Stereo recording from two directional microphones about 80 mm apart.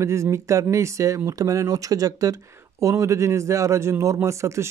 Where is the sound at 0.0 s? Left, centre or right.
Right.